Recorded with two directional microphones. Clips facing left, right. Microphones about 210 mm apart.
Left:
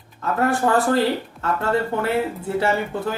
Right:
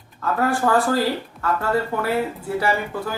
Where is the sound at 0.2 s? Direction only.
25° left (ahead or behind).